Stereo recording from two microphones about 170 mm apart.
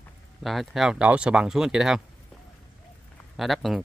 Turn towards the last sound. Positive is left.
turn(degrees=0)  # may be behind; listen again after turning